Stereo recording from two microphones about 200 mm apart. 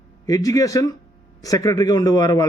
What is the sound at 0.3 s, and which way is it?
A man's voice, 15° left (ahead or behind).